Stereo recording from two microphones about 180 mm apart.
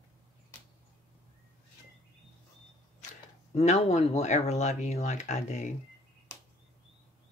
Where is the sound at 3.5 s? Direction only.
40° left (ahead or behind).